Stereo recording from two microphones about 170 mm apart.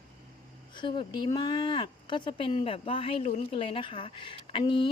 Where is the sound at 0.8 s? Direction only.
25° left (ahead or behind).